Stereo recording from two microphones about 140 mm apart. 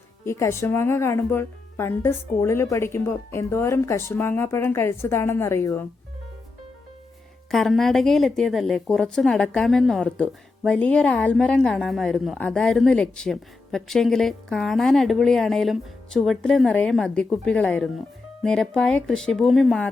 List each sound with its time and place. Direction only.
0.3 s speech: 20° left (ahead or behind)
7.5 s a woman's voice: centre (ahead or behind)